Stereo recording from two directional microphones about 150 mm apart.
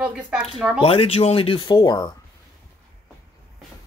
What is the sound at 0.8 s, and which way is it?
Speech, 40° left (ahead or behind).